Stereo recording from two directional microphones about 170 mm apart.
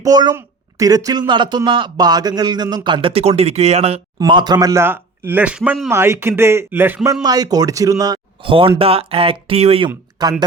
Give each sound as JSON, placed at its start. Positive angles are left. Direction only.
{"t": 0.0, "sound": "speech", "side_deg": -25}
{"t": 4.2, "sound": "speech", "side_deg": -25}
{"t": 5.9, "sound": "speech", "side_deg": -15}
{"t": 10.2, "sound": "speech", "side_deg": -25}